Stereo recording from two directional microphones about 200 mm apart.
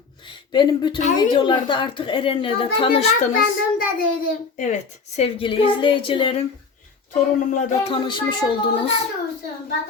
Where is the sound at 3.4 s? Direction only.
45° left (ahead or behind).